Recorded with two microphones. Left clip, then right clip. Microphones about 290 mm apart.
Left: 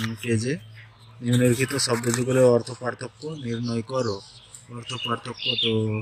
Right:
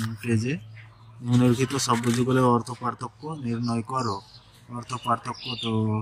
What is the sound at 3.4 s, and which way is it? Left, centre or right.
Speech, centre.